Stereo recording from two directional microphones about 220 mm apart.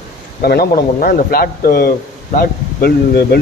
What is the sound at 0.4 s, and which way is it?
Speech, 45° left (ahead or behind).